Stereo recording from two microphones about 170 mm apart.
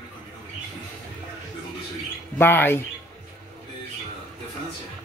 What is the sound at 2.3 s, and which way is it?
Speech, 10° left (ahead or behind).